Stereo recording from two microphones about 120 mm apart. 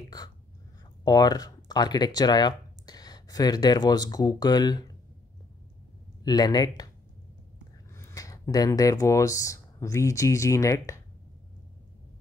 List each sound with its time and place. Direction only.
1.0 s speech: 35° left (ahead or behind)
6.2 s speech: 35° left (ahead or behind)
7.9 s speech: 25° left (ahead or behind)